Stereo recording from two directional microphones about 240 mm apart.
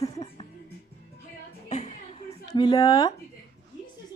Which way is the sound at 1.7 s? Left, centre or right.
Left.